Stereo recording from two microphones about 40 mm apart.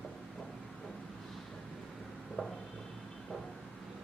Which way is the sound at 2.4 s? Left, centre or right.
Centre.